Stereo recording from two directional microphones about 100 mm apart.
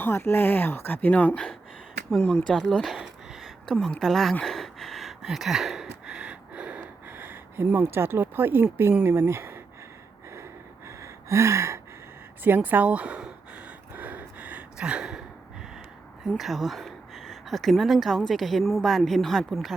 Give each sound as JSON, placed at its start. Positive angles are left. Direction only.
{"t": 0.0, "sound": "speech", "side_deg": 25}
{"t": 4.4, "sound": "a sound", "side_deg": 5}
{"t": 10.3, "sound": "gasp", "side_deg": -30}
{"t": 12.4, "sound": "speech", "side_deg": -20}
{"t": 13.9, "sound": "gasp", "side_deg": -20}
{"t": 16.4, "sound": "speech", "side_deg": 0}